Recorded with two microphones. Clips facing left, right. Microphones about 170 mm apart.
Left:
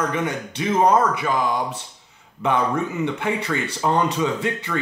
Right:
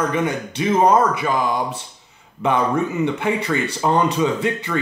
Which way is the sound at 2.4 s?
15° right (ahead or behind).